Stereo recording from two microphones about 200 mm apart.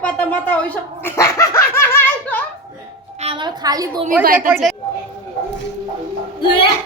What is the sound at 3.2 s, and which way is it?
Speech, 25° right (ahead or behind).